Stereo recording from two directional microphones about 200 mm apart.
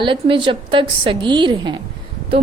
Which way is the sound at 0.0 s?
25° right (ahead or behind).